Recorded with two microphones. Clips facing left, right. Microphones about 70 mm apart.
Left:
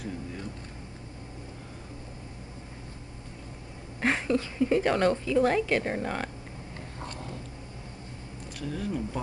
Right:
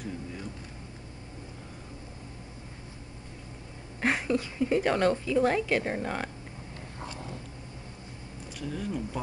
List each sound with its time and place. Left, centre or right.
4.0 s a woman's voice: centre
7.0 s a sound: centre
8.5 s a woman's voice: centre